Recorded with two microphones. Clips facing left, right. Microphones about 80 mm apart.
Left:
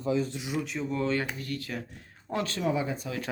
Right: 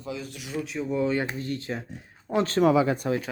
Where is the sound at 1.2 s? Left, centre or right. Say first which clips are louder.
Right 4 dB; right.